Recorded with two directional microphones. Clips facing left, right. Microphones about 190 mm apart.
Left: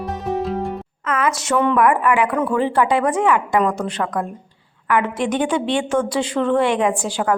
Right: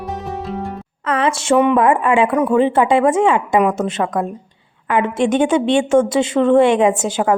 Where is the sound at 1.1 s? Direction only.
30° right (ahead or behind).